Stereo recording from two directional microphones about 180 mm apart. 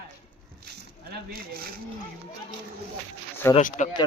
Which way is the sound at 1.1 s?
55° right (ahead or behind).